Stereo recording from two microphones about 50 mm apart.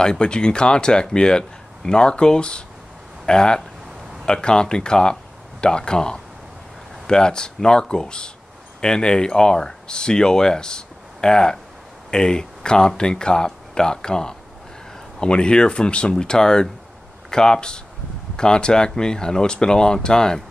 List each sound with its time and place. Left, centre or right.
0.0 s speech: centre